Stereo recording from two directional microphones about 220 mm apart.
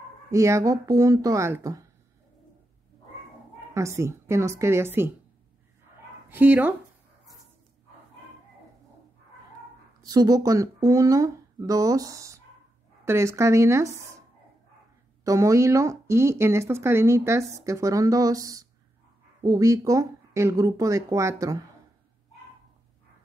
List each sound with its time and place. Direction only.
0.3 s speech: 15° right (ahead or behind)
3.7 s speech: 15° right (ahead or behind)
6.2 s speech: 10° right (ahead or behind)
10.0 s speech: 15° right (ahead or behind)
15.2 s speech: 15° right (ahead or behind)